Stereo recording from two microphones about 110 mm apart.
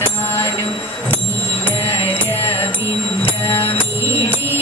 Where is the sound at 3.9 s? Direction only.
25° right (ahead or behind).